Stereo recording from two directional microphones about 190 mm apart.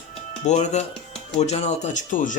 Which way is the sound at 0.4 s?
40° left (ahead or behind).